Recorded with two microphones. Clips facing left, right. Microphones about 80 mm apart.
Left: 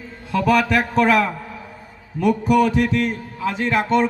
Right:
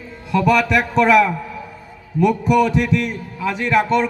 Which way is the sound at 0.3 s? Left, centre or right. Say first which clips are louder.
Right 2 dB; left.